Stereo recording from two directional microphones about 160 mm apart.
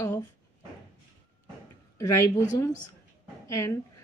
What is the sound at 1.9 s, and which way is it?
Speech, 20° left (ahead or behind).